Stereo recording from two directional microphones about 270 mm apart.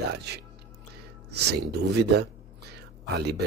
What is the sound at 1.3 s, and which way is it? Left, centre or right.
Speech, right.